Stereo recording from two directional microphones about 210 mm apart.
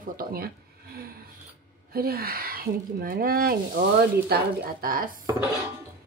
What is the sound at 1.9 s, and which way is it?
Speech, 45° right (ahead or behind).